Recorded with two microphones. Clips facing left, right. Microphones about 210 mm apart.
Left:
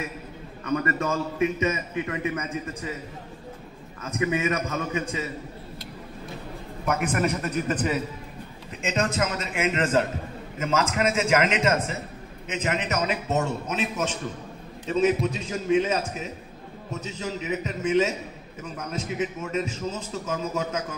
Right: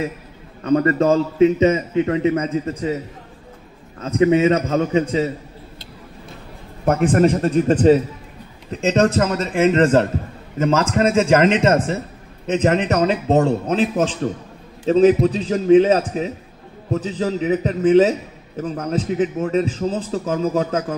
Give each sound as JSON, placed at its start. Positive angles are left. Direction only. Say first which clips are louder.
{"t": 0.7, "sound": "a man's voice", "louder": "right 10 dB", "side_deg": -30}
{"t": 4.0, "sound": "a man's voice", "louder": "right 11 dB", "side_deg": -30}
{"t": 6.8, "sound": "a man's voice", "louder": "right 10 dB", "side_deg": -30}